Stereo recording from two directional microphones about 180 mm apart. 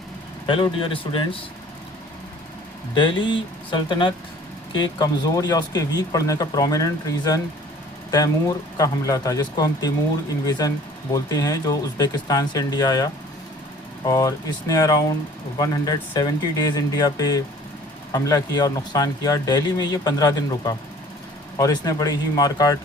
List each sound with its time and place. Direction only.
0.4 s speech: 25° left (ahead or behind)
2.9 s speech: 25° left (ahead or behind)
11.1 s speech: 20° left (ahead or behind)